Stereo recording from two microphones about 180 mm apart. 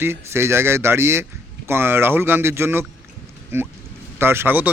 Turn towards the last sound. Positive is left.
turn(degrees=-10)  # may be behind; listen again after turning